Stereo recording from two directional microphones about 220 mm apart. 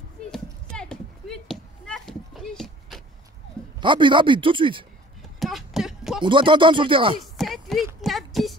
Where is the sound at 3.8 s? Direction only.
20° right (ahead or behind).